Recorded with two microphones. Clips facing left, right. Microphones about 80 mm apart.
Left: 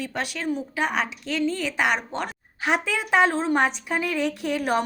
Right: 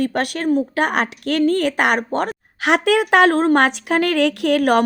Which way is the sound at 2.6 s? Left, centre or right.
Right.